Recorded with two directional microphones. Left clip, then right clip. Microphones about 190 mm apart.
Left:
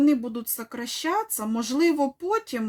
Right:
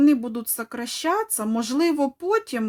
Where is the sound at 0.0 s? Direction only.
25° right (ahead or behind).